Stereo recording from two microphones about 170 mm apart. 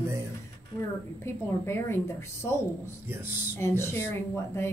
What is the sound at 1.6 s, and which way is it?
Speech, 15° left (ahead or behind).